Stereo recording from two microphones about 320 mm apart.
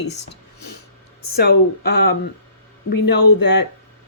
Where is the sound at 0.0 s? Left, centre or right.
Left.